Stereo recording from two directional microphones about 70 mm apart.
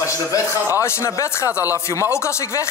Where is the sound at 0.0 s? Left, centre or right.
Left.